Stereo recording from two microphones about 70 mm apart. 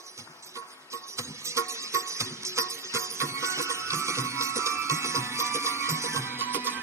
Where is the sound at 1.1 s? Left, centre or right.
Right.